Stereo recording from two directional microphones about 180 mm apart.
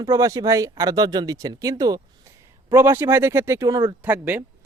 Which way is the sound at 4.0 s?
10° right (ahead or behind).